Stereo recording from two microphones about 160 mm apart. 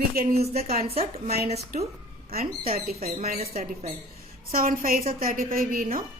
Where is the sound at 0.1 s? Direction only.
70° right (ahead or behind).